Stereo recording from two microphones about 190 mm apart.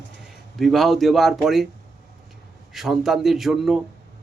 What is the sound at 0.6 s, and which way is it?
Speech, centre (ahead or behind).